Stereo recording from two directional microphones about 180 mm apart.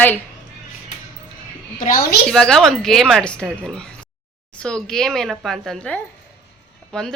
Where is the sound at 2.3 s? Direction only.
5° left (ahead or behind).